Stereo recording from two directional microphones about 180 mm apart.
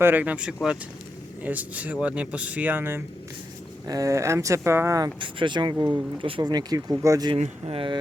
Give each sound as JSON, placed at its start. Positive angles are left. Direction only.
{"t": 0.0, "sound": "speech", "side_deg": -10}
{"t": 7.3, "sound": "speech", "side_deg": -35}